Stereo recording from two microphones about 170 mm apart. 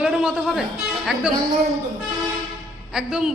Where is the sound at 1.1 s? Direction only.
Centre (ahead or behind).